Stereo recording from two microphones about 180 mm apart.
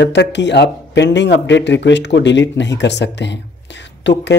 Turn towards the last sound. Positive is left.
turn(degrees=80)